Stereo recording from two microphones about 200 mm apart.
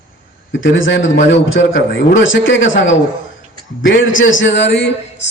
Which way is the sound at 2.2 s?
70° left (ahead or behind).